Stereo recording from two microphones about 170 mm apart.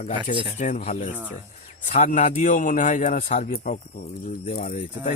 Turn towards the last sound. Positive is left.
turn(degrees=45)  # may be behind; listen again after turning